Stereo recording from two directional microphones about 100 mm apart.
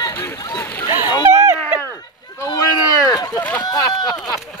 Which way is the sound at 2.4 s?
35° left (ahead or behind).